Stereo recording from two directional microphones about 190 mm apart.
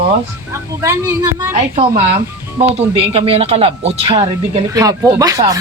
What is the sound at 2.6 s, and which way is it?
Speech, 30° right (ahead or behind).